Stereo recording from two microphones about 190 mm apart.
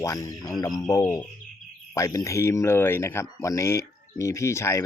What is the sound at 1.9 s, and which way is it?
Speech, 15° left (ahead or behind).